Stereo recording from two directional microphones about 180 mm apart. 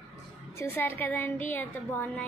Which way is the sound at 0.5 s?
10° left (ahead or behind).